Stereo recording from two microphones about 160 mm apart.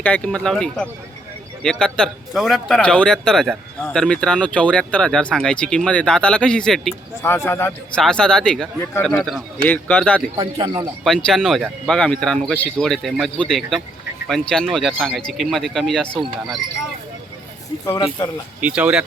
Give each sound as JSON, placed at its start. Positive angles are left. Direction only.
{"t": 0.0, "sound": "speech", "side_deg": 5}
{"t": 7.2, "sound": "a man's voice", "side_deg": 15}
{"t": 8.0, "sound": "a man's voice", "side_deg": 5}
{"t": 10.3, "sound": "speech", "side_deg": -35}
{"t": 11.0, "sound": "speech", "side_deg": 0}
{"t": 17.8, "sound": "speech", "side_deg": 20}
{"t": 18.6, "sound": "speech", "side_deg": -5}